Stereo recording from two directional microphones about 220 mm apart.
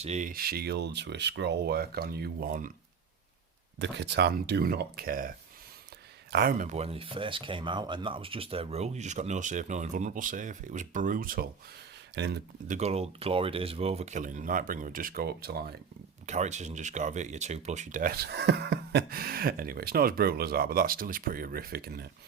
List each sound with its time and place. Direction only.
0.0 s speech: 30° right (ahead or behind)
3.8 s speech: 55° right (ahead or behind)
6.3 s speech: 40° right (ahead or behind)
12.1 s speech: 50° right (ahead or behind)
12.6 s speech: 30° right (ahead or behind)
16.2 s speech: 30° right (ahead or behind)